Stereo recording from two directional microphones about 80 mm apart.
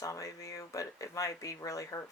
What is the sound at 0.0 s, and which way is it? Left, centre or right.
Speech, left.